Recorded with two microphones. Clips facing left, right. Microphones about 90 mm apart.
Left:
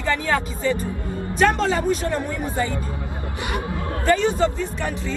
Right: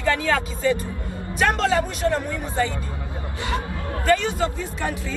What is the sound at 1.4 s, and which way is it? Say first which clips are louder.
Music: left 1 dB; centre (ahead or behind).